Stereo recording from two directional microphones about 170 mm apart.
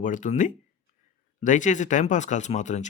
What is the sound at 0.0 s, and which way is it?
Speech, 50° left (ahead or behind).